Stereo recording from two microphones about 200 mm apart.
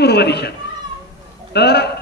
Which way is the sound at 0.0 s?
55° left (ahead or behind).